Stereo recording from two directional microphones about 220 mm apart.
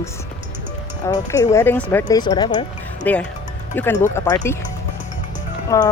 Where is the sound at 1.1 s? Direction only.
15° left (ahead or behind).